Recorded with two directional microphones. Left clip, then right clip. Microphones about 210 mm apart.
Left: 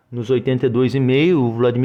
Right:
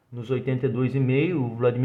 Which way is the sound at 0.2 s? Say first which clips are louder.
Left 9 dB; 40° left (ahead or behind).